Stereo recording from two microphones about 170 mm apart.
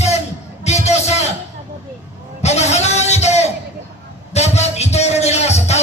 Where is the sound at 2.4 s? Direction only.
40° left (ahead or behind).